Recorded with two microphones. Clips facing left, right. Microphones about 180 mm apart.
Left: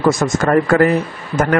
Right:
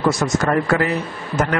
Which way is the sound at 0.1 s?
50° left (ahead or behind).